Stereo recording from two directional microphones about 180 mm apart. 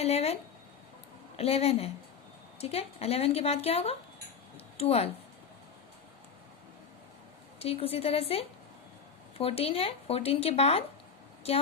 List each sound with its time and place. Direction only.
0.0 s speech: 35° left (ahead or behind)
1.4 s speech: 35° left (ahead or behind)
4.5 s a sound: 35° left (ahead or behind)
7.6 s speech: 30° left (ahead or behind)